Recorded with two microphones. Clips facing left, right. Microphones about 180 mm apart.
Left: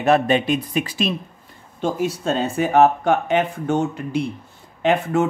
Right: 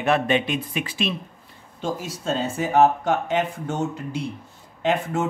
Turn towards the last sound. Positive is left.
turn(degrees=65)  # may be behind; listen again after turning